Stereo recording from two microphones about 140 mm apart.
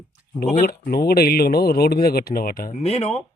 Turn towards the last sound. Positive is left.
turn(degrees=50)  # may be behind; listen again after turning